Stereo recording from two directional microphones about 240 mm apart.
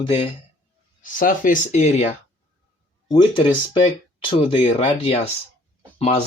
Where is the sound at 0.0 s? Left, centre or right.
Left.